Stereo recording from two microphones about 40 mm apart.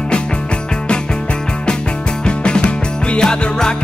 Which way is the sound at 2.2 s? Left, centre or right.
Left.